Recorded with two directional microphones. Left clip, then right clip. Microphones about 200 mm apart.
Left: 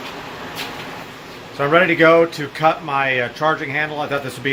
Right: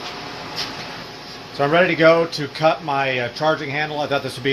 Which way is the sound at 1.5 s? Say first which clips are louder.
Left 2 dB; 25° right (ahead or behind).